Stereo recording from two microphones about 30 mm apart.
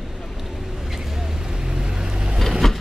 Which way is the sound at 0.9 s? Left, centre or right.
Centre.